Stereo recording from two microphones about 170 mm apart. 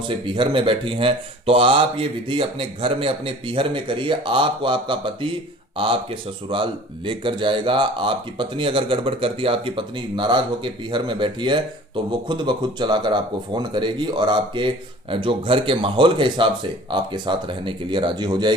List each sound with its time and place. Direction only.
0.1 s speech: 30° right (ahead or behind)